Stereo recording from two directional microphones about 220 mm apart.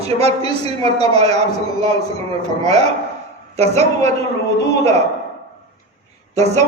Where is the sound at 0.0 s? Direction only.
30° right (ahead or behind).